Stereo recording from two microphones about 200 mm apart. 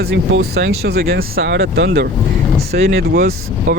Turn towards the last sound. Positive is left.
turn(degrees=-50)  # may be behind; listen again after turning